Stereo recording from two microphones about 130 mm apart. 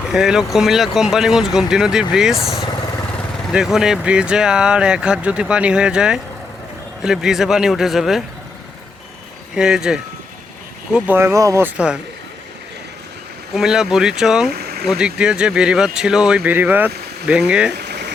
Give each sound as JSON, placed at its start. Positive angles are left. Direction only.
{"t": 0.1, "sound": "speech", "side_deg": -5}
{"t": 9.6, "sound": "speech", "side_deg": -5}
{"t": 13.5, "sound": "speech", "side_deg": -5}